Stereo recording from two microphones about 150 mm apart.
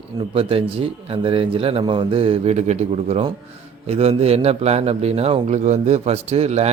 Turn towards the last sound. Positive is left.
turn(degrees=-45)  # may be behind; listen again after turning